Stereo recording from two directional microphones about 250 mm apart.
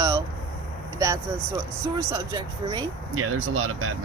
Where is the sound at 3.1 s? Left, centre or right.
Right.